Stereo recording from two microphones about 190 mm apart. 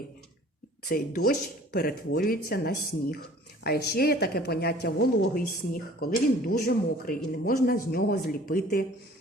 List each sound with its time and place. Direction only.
0.9 s a woman's voice: 50° left (ahead or behind)